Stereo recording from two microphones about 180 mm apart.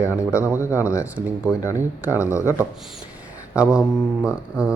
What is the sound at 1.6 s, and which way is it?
Speech, 15° left (ahead or behind).